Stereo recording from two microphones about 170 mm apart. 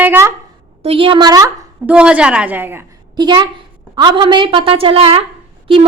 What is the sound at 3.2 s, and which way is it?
A woman's voice, 25° right (ahead or behind).